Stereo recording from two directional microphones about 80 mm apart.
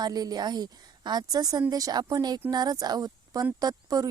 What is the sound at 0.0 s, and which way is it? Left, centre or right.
A woman's voice, right.